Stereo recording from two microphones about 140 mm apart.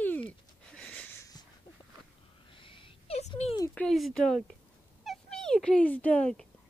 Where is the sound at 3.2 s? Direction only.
50° left (ahead or behind).